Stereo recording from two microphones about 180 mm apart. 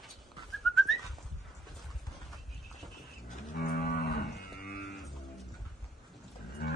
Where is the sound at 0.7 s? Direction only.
Centre (ahead or behind).